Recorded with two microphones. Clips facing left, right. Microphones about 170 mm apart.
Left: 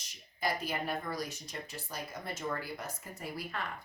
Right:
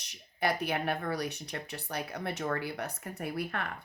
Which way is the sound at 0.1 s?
65° right (ahead or behind).